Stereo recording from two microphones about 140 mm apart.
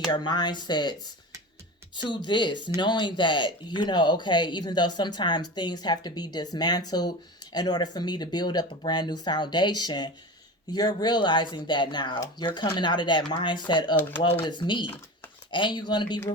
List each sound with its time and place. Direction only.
0.1 s speech: 30° left (ahead or behind)
2.0 s speech: 35° left (ahead or behind)